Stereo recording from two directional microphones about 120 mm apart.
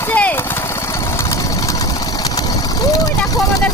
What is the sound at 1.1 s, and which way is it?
Vehicle, 25° left (ahead or behind).